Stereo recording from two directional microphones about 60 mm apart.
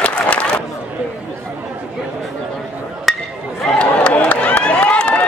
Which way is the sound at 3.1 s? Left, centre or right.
Centre.